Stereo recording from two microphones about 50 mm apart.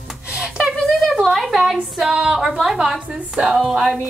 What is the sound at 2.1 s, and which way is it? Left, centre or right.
Speech, centre.